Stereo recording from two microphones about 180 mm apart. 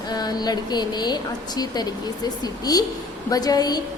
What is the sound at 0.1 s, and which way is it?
A woman's voice, 20° left (ahead or behind).